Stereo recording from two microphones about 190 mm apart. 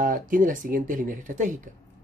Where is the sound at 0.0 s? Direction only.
45° right (ahead or behind).